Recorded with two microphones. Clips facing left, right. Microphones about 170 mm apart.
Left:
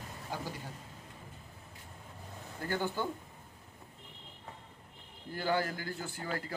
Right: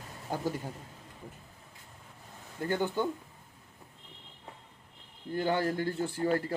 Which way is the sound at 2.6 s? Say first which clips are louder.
Right 5 dB; 20° right (ahead or behind).